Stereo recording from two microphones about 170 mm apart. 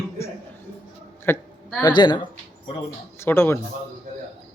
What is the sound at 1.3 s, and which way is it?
Speech, 15° left (ahead or behind).